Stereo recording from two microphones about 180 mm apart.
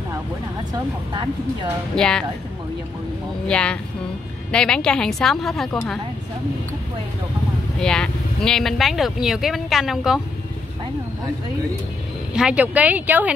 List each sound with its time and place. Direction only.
1.1 s speech: 25° right (ahead or behind)
2.0 s speech: 5° left (ahead or behind)
3.4 s speech: 5° left (ahead or behind)
7.8 s speech: 5° left (ahead or behind)
12.4 s speech: 5° right (ahead or behind)